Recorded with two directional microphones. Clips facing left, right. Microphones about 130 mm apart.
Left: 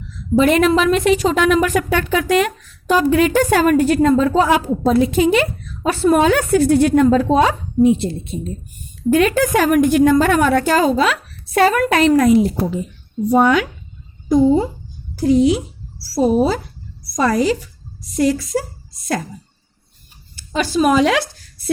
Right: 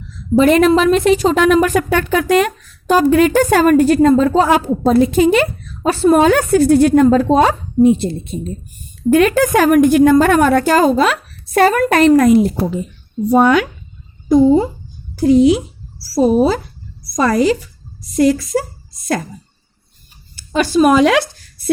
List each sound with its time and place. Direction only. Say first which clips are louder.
0.3 s a woman's voice: right 3 dB; 40° right (ahead or behind)
9.0 s a woman's voice: right 3 dB; 50° right (ahead or behind)
15.3 s speech: right 3 dB; 80° right
17.1 s a woman's voice: right 3 dB; 85° right
20.6 s speech: right 4 dB; 55° right (ahead or behind)